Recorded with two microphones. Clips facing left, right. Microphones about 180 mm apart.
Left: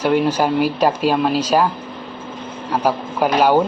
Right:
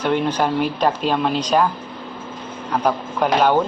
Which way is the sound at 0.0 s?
10° left (ahead or behind).